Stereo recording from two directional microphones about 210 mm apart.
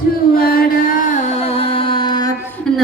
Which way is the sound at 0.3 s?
45° left (ahead or behind).